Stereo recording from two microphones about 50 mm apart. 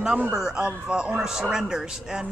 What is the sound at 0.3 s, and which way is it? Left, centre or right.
Speech, centre.